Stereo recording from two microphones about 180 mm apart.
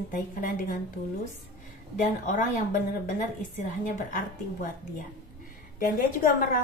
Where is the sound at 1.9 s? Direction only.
45° left (ahead or behind).